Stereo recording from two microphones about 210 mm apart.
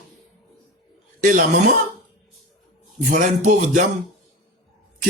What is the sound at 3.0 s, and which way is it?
Music, 35° right (ahead or behind).